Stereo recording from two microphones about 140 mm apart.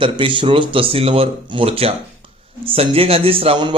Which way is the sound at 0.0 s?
35° right (ahead or behind).